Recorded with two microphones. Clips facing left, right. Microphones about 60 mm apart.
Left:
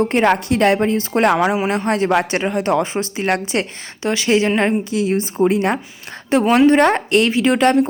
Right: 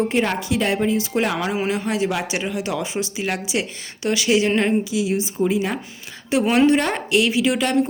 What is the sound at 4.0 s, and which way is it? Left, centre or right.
Speech, left.